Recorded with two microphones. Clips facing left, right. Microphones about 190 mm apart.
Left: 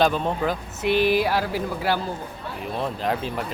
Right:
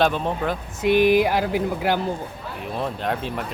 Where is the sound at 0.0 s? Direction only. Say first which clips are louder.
Even; centre (ahead or behind).